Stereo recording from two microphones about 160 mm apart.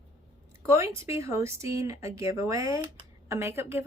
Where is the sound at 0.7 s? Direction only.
15° right (ahead or behind).